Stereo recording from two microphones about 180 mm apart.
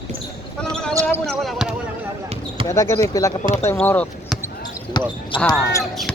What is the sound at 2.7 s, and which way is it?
Speech, 15° left (ahead or behind).